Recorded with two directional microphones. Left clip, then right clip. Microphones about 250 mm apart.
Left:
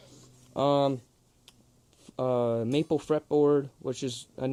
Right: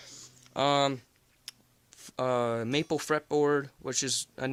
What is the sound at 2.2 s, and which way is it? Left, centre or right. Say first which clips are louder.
Speech: left 1 dB; centre.